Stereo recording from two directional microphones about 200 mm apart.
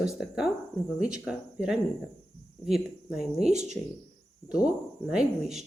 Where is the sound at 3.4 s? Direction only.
35° right (ahead or behind).